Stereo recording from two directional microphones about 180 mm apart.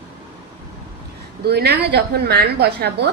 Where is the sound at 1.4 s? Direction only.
65° right (ahead or behind).